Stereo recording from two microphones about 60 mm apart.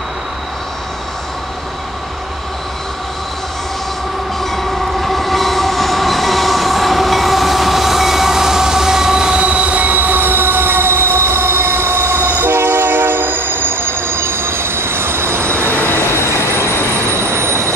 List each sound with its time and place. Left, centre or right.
4.4 s train: centre; by 15.7 s right
16.0 s train: left
17.2 s train: right